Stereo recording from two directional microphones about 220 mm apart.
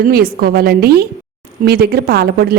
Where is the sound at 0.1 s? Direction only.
45° right (ahead or behind).